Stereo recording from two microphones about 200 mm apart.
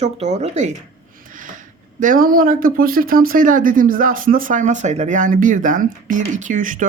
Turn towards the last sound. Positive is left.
turn(degrees=-40)  # may be behind; listen again after turning